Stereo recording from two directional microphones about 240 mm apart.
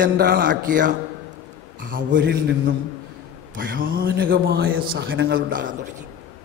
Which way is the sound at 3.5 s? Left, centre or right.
Right.